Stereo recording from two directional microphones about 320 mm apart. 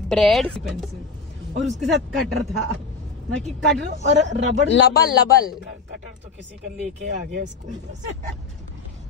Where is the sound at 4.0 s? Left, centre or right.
Right.